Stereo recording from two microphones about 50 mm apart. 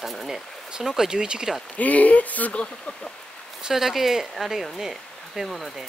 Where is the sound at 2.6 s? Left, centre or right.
Centre.